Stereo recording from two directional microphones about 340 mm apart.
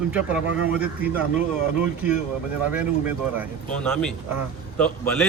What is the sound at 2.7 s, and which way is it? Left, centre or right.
A man's voice, centre.